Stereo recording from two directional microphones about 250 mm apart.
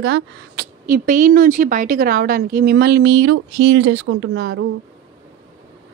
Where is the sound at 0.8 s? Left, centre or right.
Right.